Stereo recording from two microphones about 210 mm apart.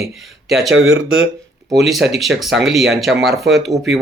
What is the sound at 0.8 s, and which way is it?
Speech, 70° right (ahead or behind).